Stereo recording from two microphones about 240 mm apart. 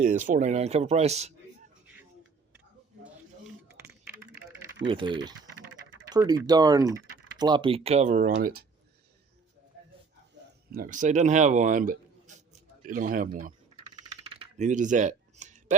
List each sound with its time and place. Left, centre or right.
0.0 s speech: right
4.9 s speech: centre
6.5 s speech: centre
8.3 s speech: right
10.7 s speech: right
13.7 s coin: right